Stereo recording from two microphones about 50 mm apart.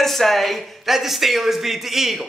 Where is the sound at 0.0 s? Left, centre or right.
Centre.